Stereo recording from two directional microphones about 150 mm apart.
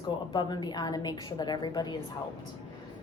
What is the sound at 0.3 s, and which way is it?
A woman's voice, 30° left (ahead or behind).